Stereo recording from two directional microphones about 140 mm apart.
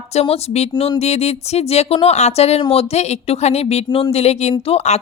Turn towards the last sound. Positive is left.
turn(degrees=50)  # may be behind; listen again after turning